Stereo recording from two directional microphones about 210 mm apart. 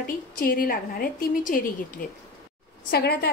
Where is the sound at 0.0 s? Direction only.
45° left (ahead or behind).